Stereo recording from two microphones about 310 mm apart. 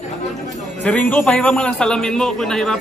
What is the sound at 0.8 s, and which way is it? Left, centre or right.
A man's voice, centre.